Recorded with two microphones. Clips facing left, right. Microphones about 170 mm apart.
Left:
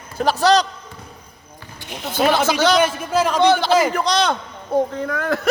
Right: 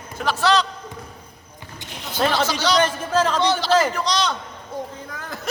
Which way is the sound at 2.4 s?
50° left (ahead or behind).